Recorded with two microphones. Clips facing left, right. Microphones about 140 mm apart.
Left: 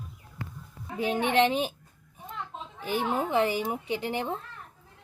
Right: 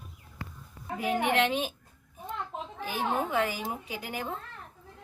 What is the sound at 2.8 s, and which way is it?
Speech, 25° left (ahead or behind).